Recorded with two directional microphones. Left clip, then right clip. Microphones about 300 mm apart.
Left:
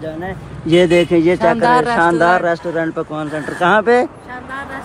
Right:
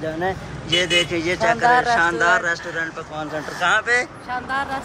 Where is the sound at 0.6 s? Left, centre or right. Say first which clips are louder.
Left 7 dB; centre.